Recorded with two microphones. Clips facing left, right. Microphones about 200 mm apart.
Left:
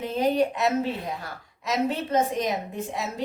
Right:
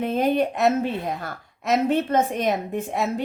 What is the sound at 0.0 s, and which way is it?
A woman's voice, 55° right (ahead or behind).